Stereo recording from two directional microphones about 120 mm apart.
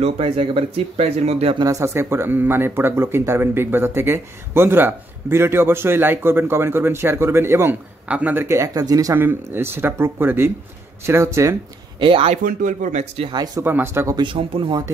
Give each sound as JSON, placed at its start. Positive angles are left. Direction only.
{"t": 0.0, "sound": "speech", "side_deg": -50}
{"t": 1.6, "sound": "speech", "side_deg": -25}
{"t": 9.1, "sound": "speech", "side_deg": -15}
{"t": 12.0, "sound": "speech", "side_deg": -50}
{"t": 12.6, "sound": "speech", "side_deg": -80}
{"t": 13.6, "sound": "speech", "side_deg": -20}
{"t": 14.1, "sound": "speech", "side_deg": -45}